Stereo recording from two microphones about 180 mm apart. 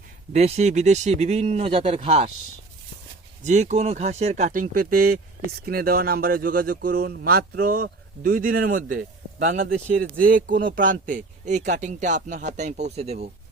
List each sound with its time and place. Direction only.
0.3 s speech: 35° right (ahead or behind)
3.4 s speech: 40° right (ahead or behind)